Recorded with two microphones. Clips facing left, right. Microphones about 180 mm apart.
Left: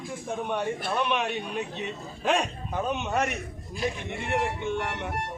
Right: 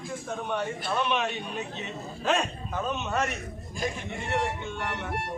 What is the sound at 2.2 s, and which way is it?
Speech, 15° left (ahead or behind).